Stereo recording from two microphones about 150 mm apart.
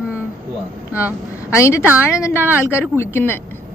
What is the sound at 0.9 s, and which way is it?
Speech, 10° right (ahead or behind).